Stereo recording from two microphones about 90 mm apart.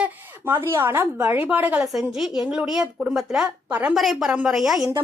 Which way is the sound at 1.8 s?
5° right (ahead or behind).